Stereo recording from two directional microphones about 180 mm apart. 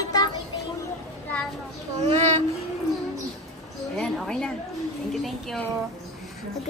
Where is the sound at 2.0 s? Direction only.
40° right (ahead or behind).